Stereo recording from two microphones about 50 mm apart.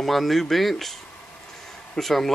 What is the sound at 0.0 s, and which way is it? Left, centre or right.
Speech, centre.